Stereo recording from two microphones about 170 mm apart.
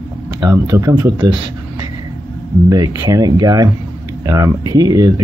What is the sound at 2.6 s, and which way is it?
Speech, 25° right (ahead or behind).